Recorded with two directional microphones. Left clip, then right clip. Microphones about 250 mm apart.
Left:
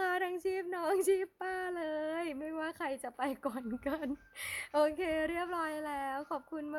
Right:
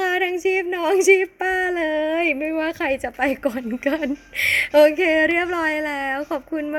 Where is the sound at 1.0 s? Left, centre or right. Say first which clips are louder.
Right 19 dB; left.